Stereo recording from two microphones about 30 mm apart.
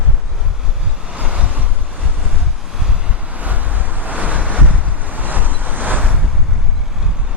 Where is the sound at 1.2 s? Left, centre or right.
Right.